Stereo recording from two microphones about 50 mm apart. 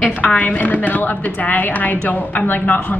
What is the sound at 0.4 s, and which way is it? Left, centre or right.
A woman's voice, left.